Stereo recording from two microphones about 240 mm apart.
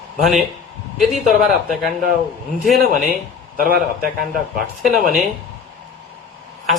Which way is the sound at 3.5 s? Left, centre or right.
Right.